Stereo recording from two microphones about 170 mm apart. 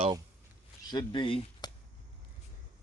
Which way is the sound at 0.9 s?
25° left (ahead or behind).